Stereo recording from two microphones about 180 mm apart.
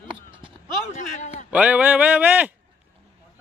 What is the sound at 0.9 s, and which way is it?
Speech, 40° left (ahead or behind).